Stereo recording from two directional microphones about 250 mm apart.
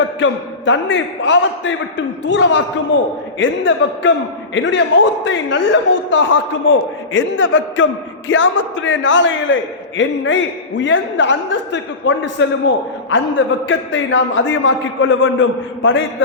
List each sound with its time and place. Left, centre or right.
0.0 s a man's voice: left